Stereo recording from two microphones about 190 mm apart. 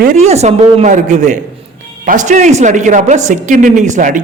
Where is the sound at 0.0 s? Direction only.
40° right (ahead or behind).